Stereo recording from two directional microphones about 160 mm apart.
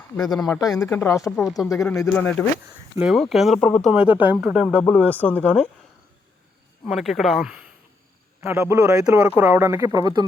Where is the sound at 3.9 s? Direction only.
5° right (ahead or behind); by 5.5 s 10° left (ahead or behind).